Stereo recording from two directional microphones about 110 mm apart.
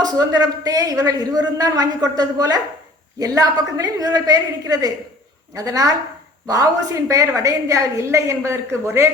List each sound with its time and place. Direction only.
0.0 s a woman's voice: 35° right (ahead or behind)